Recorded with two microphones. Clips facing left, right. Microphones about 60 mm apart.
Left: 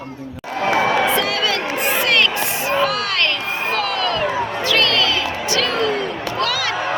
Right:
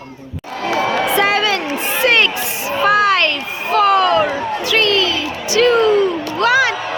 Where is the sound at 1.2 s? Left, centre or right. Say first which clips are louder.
Right 5 dB; right.